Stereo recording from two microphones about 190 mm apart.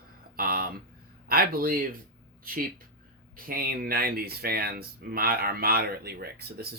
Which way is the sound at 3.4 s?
50° right (ahead or behind).